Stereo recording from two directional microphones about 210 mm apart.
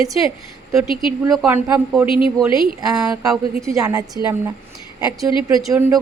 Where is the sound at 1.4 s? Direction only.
10° right (ahead or behind).